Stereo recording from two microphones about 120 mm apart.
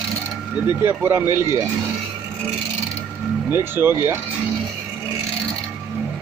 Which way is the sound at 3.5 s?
20° right (ahead or behind).